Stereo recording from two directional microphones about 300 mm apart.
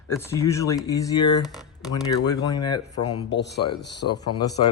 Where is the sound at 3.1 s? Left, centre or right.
Left.